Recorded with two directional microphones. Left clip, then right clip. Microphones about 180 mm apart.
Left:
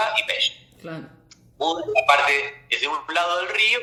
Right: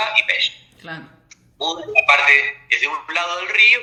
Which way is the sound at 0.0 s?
5° right (ahead or behind).